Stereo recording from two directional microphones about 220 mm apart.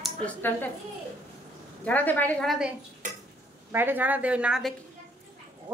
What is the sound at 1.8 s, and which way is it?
A woman's voice, 5° left (ahead or behind).